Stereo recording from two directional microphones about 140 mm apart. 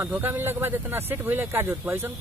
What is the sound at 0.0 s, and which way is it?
Speech, 15° right (ahead or behind).